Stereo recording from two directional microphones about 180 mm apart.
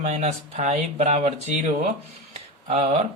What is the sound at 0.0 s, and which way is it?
Speech, 40° right (ahead or behind).